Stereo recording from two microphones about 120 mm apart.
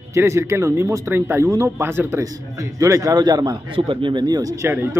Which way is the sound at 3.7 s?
45° right (ahead or behind).